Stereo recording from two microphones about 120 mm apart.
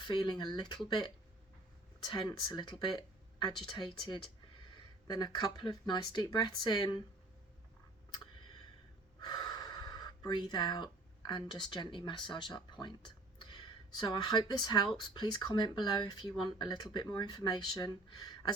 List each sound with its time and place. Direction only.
0.0 s speech: 40° left (ahead or behind)
9.2 s speech: 35° left (ahead or behind)